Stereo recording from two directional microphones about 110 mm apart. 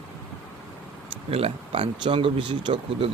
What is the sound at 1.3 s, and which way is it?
Speech, 60° right (ahead or behind).